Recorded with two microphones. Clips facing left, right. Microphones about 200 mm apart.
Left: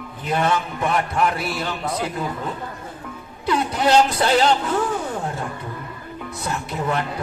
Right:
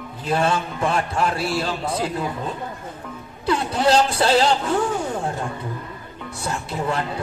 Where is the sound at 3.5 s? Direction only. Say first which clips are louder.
Even; 30° right (ahead or behind).